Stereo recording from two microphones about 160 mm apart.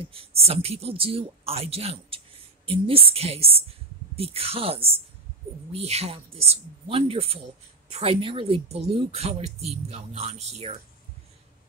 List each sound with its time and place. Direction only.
0.0 s speech: 35° right (ahead or behind)